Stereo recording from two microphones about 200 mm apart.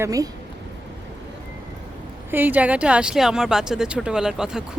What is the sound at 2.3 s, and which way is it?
Speech, 10° right (ahead or behind).